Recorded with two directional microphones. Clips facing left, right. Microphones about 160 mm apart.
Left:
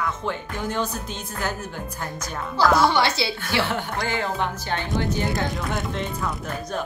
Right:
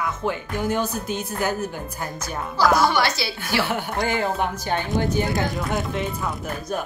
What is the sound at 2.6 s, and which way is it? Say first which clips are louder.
Speech: even; 5° right (ahead or behind).